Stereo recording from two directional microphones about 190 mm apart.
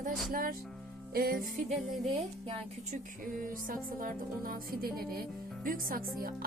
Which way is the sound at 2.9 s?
45° right (ahead or behind).